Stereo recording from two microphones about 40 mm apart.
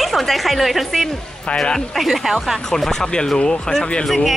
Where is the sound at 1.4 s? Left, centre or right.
Left.